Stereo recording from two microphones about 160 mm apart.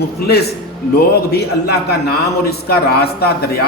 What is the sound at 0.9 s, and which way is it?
A man's voice, 85° left.